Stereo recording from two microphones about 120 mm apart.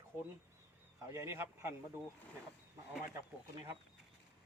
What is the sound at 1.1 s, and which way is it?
Speech, 20° right (ahead or behind).